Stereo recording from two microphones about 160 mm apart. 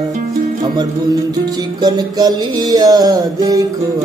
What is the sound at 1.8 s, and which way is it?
Music, 25° right (ahead or behind).